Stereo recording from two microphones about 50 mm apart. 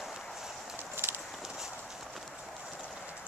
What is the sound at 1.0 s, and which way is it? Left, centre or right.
Clip-clop, right.